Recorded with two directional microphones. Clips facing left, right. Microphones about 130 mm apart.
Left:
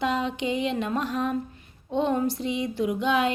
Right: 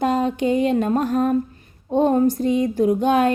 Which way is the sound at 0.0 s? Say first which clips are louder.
Right 7 dB; 45° right (ahead or behind).